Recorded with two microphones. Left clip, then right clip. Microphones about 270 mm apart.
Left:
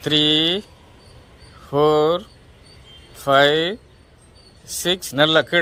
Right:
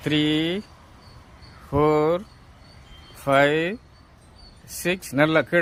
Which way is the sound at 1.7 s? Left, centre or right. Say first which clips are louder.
Left 4 dB; centre.